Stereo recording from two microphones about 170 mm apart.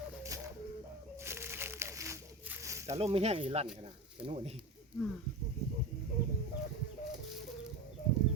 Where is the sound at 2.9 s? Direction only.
35° right (ahead or behind).